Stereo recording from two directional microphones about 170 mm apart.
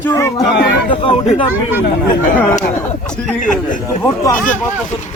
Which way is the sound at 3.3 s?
50° left (ahead or behind).